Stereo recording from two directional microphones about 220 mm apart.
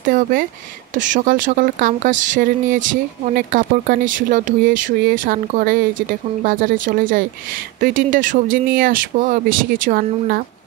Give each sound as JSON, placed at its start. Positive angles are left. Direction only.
{"t": 0.0, "sound": "speech", "side_deg": -40}